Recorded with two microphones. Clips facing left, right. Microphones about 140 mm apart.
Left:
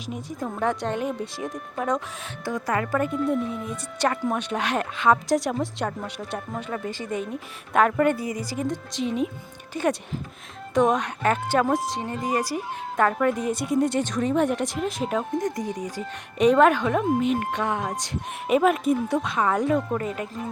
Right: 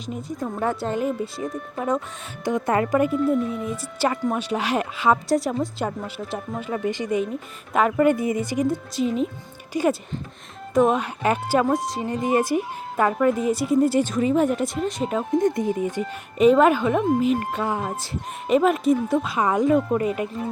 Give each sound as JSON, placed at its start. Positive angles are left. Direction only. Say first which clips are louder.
{"t": 0.0, "sound": "speech", "louder": "right 2 dB", "side_deg": 0}
{"t": 2.4, "sound": "speech", "louder": "right 5 dB", "side_deg": -20}
{"t": 3.0, "sound": "speech", "louder": "right 4 dB", "side_deg": 0}
{"t": 6.8, "sound": "speech", "louder": "right 6 dB", "side_deg": -15}
{"t": 7.7, "sound": "speech", "louder": "right 1 dB", "side_deg": -5}
{"t": 8.1, "sound": "speech", "louder": "right 6 dB", "side_deg": -20}
{"t": 8.5, "sound": "speech", "louder": "right 5 dB", "side_deg": -5}
{"t": 12.2, "sound": "speech", "louder": "right 6 dB", "side_deg": -20}
{"t": 13.0, "sound": "speech", "louder": "right 2 dB", "side_deg": -5}
{"t": 15.4, "sound": "speech", "louder": "right 6 dB", "side_deg": -25}
{"t": 16.4, "sound": "speech", "louder": "right 2 dB", "side_deg": 0}